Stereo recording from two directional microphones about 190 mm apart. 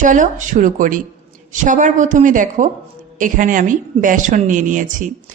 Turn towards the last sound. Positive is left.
turn(degrees=-40)  # may be behind; listen again after turning